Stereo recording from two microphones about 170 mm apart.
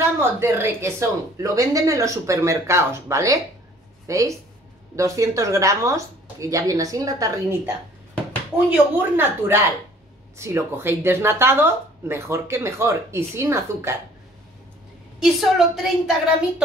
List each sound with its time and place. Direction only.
0.0 s a woman's voice: 15° right (ahead or behind)
15.2 s a woman's voice: centre (ahead or behind)